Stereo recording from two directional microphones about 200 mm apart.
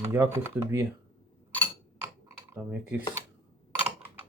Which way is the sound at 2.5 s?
10° right (ahead or behind).